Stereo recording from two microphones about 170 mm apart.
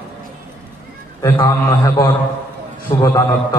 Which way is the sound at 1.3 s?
20° left (ahead or behind).